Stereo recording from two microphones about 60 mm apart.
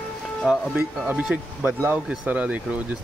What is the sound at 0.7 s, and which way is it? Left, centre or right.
Speech, right.